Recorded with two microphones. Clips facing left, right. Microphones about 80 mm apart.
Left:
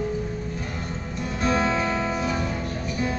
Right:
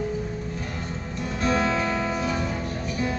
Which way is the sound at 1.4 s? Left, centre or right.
Centre.